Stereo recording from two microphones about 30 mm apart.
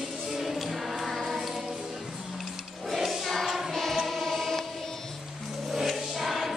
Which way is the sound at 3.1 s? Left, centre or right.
Centre.